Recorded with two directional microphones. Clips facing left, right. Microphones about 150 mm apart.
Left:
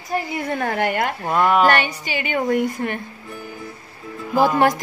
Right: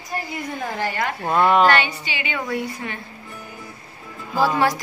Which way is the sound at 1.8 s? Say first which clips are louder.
Left 2 dB; 45° left (ahead or behind).